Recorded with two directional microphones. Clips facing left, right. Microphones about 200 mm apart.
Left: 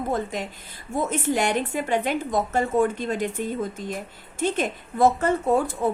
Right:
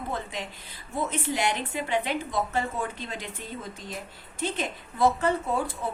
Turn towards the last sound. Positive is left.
turn(degrees=45)  # may be behind; listen again after turning